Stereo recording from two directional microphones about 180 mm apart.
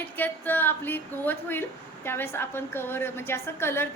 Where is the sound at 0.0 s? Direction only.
10° left (ahead or behind).